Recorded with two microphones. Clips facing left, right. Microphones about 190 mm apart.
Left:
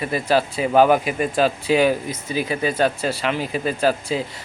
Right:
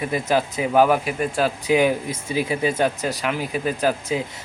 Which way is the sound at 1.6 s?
15° right (ahead or behind).